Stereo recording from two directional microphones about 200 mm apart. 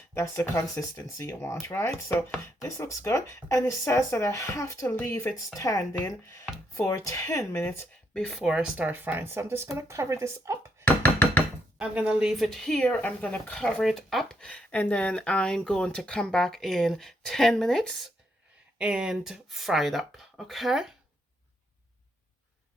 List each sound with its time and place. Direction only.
0.1 s speech: 15° left (ahead or behind); by 10.6 s 15° right (ahead or behind)
10.8 s music: 10° left (ahead or behind)
11.8 s speech: 5° right (ahead or behind)